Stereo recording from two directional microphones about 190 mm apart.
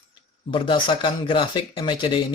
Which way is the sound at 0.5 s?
25° left (ahead or behind).